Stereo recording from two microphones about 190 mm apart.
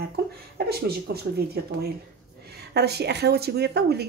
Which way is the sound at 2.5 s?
60° right (ahead or behind).